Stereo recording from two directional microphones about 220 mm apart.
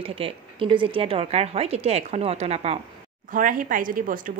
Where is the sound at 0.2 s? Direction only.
25° right (ahead or behind).